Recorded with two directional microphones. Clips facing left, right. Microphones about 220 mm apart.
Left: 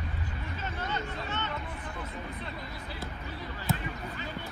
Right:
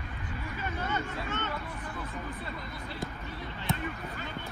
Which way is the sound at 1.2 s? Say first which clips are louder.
Right 1 dB; 45° right (ahead or behind).